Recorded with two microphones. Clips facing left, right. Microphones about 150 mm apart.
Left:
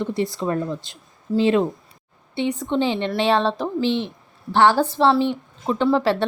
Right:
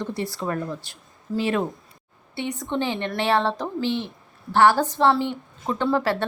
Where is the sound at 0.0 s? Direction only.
15° left (ahead or behind).